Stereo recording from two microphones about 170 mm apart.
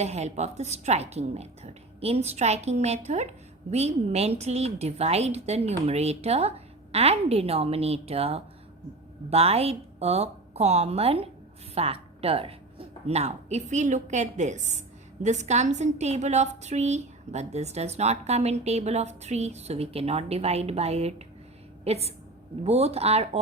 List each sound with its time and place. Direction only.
0.0 s a woman's voice: 40° right (ahead or behind)